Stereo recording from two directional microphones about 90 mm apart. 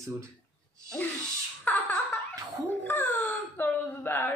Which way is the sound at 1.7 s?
15° left (ahead or behind).